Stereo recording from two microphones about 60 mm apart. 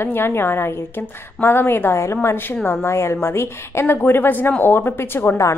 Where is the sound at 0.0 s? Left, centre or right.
Left.